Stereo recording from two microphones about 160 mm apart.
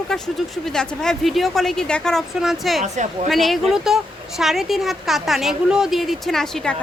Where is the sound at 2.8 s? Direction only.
45° right (ahead or behind).